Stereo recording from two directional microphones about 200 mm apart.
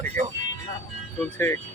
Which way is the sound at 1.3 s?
10° left (ahead or behind).